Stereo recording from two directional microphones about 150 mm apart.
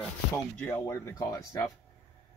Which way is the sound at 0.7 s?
15° left (ahead or behind).